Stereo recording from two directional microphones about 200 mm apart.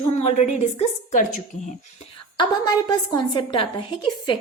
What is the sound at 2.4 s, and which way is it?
A woman's voice, 20° left (ahead or behind).